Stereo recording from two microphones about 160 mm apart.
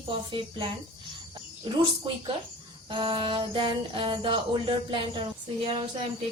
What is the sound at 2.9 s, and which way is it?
Music, 30° right (ahead or behind).